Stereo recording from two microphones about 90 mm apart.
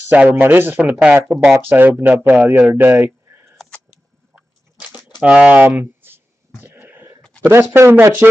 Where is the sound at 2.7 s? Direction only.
25° right (ahead or behind).